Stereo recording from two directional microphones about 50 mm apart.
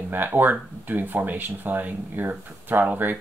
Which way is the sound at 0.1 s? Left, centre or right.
Right.